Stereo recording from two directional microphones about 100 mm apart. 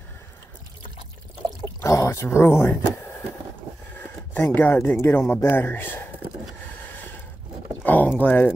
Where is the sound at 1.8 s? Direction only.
30° left (ahead or behind).